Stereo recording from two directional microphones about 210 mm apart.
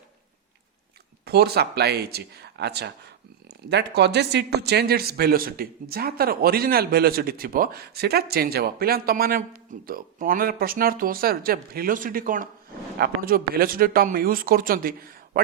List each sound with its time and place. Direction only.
1.2 s a man's voice: 50° right (ahead or behind)